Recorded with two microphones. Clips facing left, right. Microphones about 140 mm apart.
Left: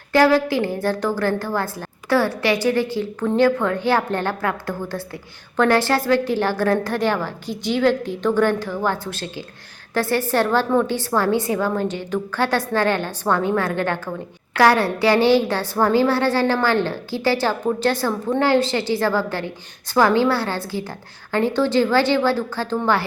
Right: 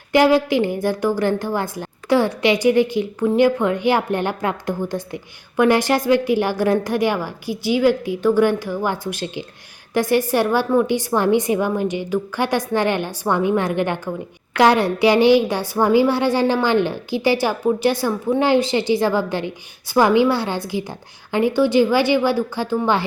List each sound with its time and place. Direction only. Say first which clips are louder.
0.1 s a woman's voice: right 1 dB; 15° right (ahead or behind)